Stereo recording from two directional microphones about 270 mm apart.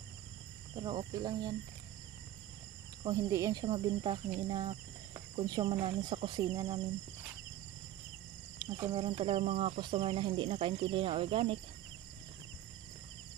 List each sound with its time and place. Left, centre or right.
0.7 s speech: centre
3.0 s speech: centre
8.5 s speech: centre